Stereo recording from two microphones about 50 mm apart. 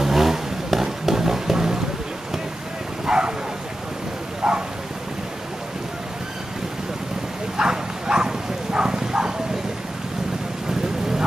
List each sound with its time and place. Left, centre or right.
0.0 s vehicle: centre
3.1 s bow-wow: centre
4.4 s a sound: centre
7.5 s bow-wow: centre